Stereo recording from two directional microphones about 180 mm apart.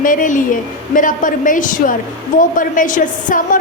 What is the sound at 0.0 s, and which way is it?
A woman's voice, 50° left (ahead or behind).